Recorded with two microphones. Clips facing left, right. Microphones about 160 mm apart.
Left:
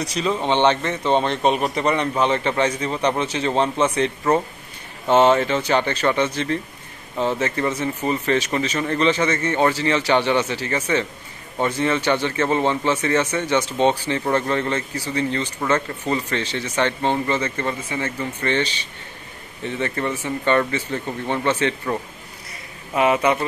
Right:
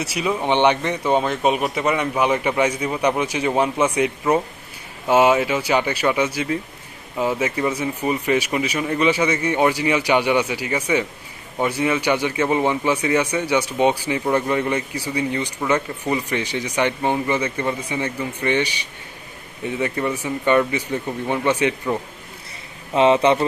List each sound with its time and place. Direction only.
0.0 s speech: 10° right (ahead or behind)
22.9 s speech: 25° right (ahead or behind)